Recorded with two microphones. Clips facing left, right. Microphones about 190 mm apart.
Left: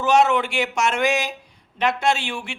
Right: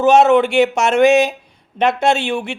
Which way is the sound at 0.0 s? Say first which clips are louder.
Right 7 dB; 25° right (ahead or behind).